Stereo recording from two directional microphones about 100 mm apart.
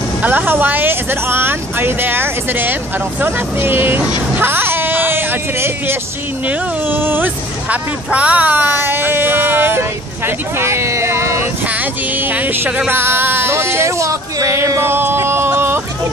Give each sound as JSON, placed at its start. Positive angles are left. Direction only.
{"t": 0.2, "sound": "speech", "side_deg": -15}
{"t": 12.4, "sound": "speech", "side_deg": -15}